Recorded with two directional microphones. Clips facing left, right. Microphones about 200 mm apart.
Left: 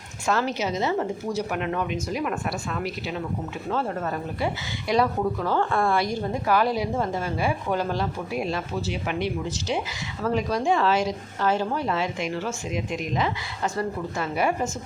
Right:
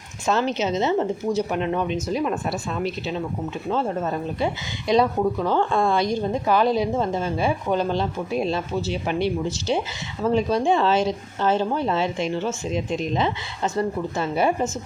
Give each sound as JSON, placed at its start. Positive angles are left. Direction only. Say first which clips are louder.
{"t": 0.3, "sound": "speech", "louder": "right 3 dB", "side_deg": -20}